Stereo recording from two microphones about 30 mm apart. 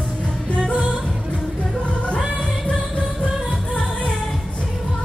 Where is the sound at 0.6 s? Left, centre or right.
Left.